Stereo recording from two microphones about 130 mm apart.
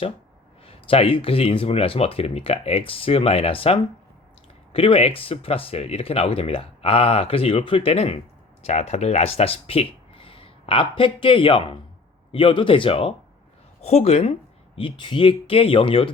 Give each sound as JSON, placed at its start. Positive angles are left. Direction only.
{"t": 0.6, "sound": "speech", "side_deg": 45}
{"t": 13.8, "sound": "speech", "side_deg": 55}
{"t": 14.8, "sound": "speech", "side_deg": 40}